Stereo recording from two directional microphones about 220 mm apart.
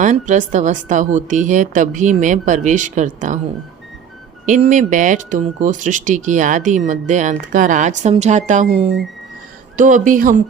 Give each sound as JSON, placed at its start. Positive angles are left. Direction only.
{"t": 0.0, "sound": "speech", "side_deg": -35}
{"t": 4.4, "sound": "speech", "side_deg": -35}